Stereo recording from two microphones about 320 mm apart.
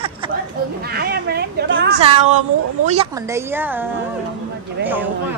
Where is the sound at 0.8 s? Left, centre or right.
Right.